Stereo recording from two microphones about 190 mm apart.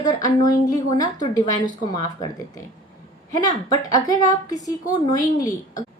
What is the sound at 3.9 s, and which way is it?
A woman's voice, 20° left (ahead or behind).